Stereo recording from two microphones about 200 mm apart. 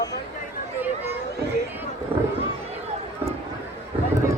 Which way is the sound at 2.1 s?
25° right (ahead or behind).